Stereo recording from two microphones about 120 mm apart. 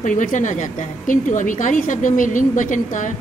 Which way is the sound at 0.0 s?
90° left.